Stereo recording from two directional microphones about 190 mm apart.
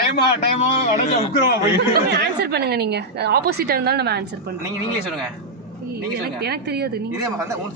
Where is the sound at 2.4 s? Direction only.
55° right (ahead or behind).